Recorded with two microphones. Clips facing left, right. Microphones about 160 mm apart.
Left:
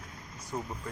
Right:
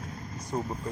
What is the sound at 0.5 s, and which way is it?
Speech, 30° right (ahead or behind).